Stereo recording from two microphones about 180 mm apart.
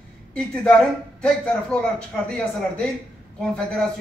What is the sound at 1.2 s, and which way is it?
A man's voice, 5° left (ahead or behind).